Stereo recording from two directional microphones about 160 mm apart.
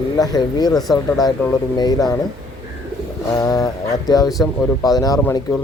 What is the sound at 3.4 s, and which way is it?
Speech, 20° left (ahead or behind).